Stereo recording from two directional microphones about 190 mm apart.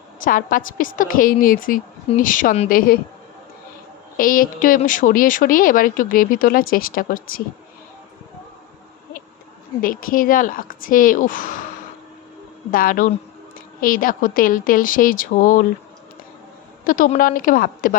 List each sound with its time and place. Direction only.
0.2 s speech: 45° left (ahead or behind)
4.2 s speech: 45° left (ahead or behind)
9.8 s speech: 50° left (ahead or behind)
12.7 s speech: 45° left (ahead or behind)
16.8 s speech: 45° left (ahead or behind)